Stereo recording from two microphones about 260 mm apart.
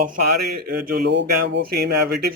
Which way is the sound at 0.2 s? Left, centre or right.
Right.